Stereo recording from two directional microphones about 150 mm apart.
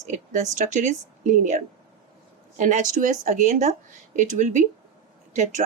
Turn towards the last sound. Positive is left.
turn(degrees=-55)  # may be behind; listen again after turning